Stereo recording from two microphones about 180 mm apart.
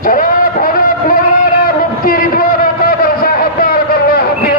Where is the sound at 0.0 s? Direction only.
50° left (ahead or behind).